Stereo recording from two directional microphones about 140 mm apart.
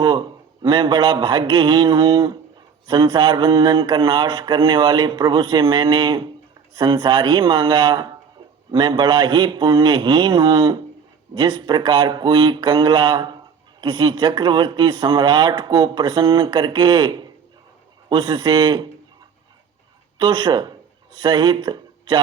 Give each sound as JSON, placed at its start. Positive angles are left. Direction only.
{"t": 0.0, "sound": "mantra", "side_deg": -35}
{"t": 20.1, "sound": "speech", "side_deg": -35}